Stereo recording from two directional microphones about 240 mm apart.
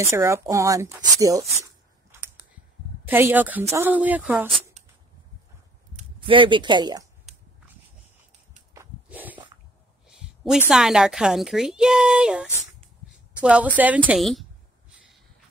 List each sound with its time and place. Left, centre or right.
0.0 s speech: centre
2.0 s scissors: centre
3.1 s speech: centre
4.5 s a sound: right
5.9 s speech: right
8.7 s walk: centre
10.0 s a woman's voice: centre